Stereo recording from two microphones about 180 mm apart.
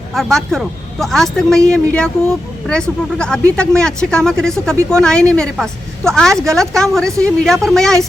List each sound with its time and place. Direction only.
0.1 s speech: centre (ahead or behind)